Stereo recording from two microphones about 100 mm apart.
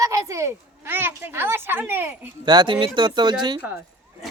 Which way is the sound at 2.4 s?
50° right (ahead or behind).